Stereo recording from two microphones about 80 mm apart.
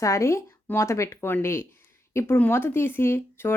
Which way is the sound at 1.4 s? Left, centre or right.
Left.